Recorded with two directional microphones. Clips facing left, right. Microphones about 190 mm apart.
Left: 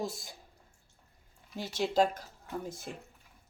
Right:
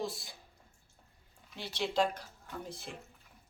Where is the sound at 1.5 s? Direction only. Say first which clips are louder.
Left 4 dB; 45° left (ahead or behind).